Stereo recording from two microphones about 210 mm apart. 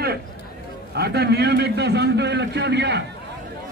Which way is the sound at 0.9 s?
50° right (ahead or behind).